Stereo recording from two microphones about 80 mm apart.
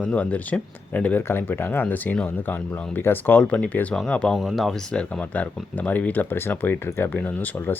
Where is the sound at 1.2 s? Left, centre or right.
Left; by 4.4 s centre.